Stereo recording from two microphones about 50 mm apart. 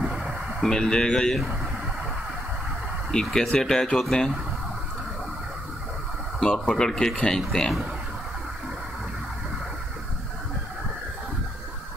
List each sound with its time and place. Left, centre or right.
0.0 s a sound: centre
0.6 s speech: centre
3.1 s speech: centre
6.4 s speech: centre